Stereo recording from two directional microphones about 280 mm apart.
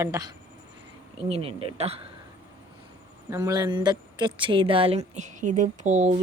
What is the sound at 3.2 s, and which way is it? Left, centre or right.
Speech, centre.